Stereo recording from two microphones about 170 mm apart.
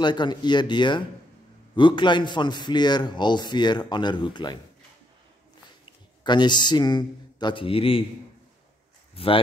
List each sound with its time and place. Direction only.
0.0 s a man's voice: 25° left (ahead or behind)
6.2 s a man's voice: 25° left (ahead or behind)
9.1 s speech: 35° left (ahead or behind)